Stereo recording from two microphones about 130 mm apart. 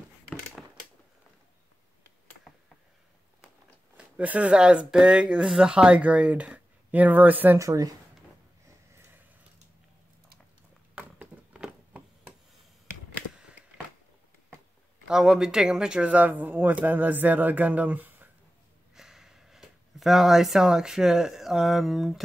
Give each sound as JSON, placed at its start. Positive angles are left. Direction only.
{"t": 0.6, "sound": "a sound", "side_deg": 0}
{"t": 3.9, "sound": "speech", "side_deg": -10}
{"t": 7.5, "sound": "speech", "side_deg": -25}
{"t": 11.0, "sound": "a sound", "side_deg": -5}
{"t": 15.0, "sound": "speech", "side_deg": -5}
{"t": 18.9, "sound": "speech", "side_deg": -5}